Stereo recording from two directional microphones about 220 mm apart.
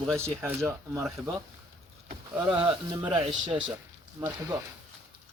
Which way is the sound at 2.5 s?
25° right (ahead or behind).